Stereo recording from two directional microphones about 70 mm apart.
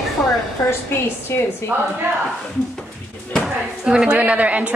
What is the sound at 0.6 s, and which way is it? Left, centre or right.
Speech, left.